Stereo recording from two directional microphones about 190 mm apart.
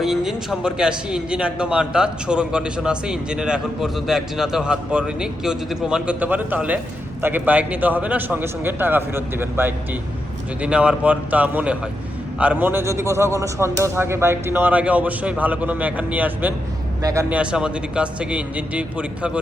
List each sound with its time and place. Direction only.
0.0 s a man's voice: centre (ahead or behind)
17.0 s speech: 20° right (ahead or behind)
17.2 s a man's voice: 5° right (ahead or behind)